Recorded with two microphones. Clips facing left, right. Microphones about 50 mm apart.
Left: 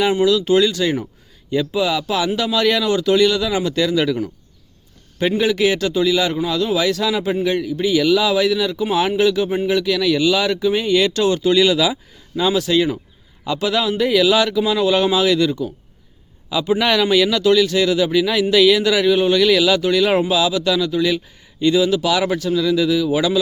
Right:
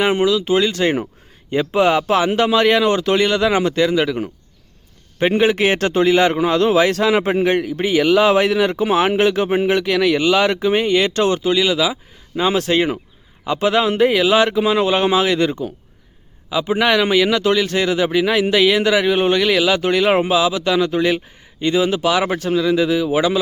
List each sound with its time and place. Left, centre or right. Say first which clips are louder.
0.0 s speech: even; right
0.3 s speech: left 1 dB; right
0.7 s speech: right 2 dB; right
3.8 s speech: right 1 dB; right
5.4 s a man's voice: right 1 dB; right; by 11.9 s centre
12.5 s speech: even; right
16.5 s speech: right 1 dB; right
20.7 s speech: right 2 dB; right